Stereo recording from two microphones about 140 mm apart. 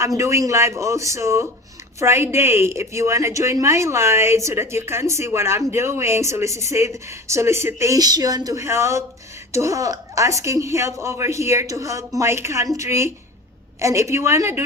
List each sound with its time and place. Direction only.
0.2 s a woman's voice: 20° right (ahead or behind)